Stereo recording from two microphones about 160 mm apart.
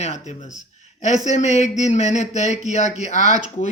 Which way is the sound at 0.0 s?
45° left (ahead or behind).